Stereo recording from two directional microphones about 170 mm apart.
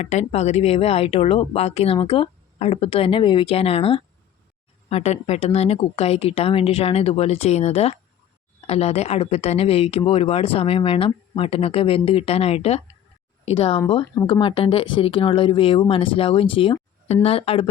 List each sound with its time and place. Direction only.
0.0 s speech: 40° left (ahead or behind)